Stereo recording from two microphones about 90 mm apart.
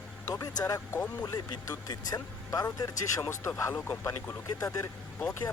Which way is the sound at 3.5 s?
25° left (ahead or behind).